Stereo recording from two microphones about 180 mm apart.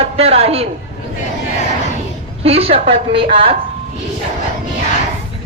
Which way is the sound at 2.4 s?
35° right (ahead or behind).